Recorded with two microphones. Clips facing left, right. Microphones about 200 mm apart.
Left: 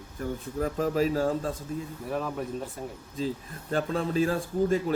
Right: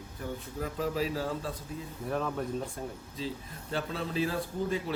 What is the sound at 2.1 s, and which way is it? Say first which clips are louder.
Speech: left 1 dB; 5° left (ahead or behind).